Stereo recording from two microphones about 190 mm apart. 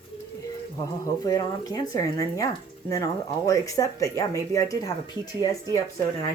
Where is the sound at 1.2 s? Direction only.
20° left (ahead or behind).